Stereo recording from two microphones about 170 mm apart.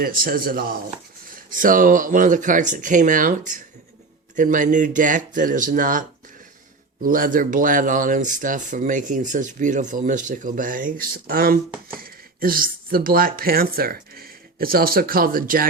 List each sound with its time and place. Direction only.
0.0 s speech: 60° right (ahead or behind)